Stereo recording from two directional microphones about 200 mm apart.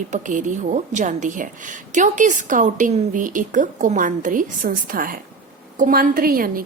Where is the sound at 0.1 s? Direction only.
40° right (ahead or behind).